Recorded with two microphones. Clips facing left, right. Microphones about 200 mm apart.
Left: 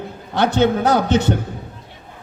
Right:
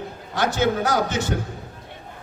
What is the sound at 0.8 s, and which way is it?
Speech, 60° left (ahead or behind).